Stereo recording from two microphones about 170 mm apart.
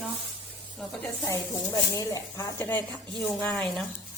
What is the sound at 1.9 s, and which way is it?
A woman's voice, 20° left (ahead or behind).